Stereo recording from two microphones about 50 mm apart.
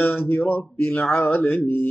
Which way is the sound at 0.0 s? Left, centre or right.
Left.